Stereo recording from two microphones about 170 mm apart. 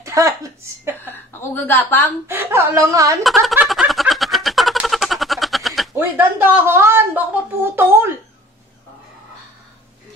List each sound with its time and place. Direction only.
0.0 s speech: 20° right (ahead or behind)
1.0 s a woman's voice: 10° left (ahead or behind)
2.2 s speech: 15° right (ahead or behind)
3.3 s a sound: centre (ahead or behind)
5.9 s speech: 10° right (ahead or behind)